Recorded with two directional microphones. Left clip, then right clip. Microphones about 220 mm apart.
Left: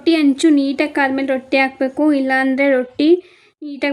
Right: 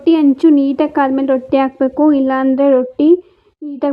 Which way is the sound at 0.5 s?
25° left (ahead or behind).